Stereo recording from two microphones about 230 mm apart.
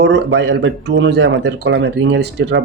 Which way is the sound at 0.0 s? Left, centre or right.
Right.